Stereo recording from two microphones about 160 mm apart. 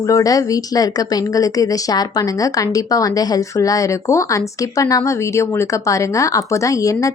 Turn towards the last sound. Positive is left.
turn(degrees=20)  # may be behind; listen again after turning